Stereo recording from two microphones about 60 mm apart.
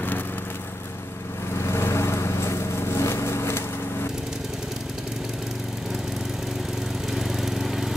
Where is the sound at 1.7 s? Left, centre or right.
Left.